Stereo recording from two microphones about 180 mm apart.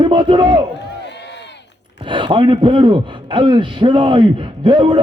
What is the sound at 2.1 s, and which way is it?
A man's voice, 25° right (ahead or behind).